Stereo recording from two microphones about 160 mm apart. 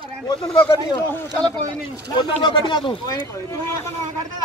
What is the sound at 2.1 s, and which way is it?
Speech, 25° left (ahead or behind).